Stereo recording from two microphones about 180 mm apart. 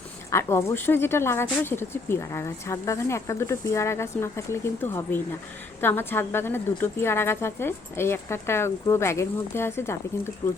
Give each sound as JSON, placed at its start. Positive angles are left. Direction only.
{"t": 0.3, "sound": "speech", "side_deg": 15}
{"t": 10.4, "sound": "speech", "side_deg": 25}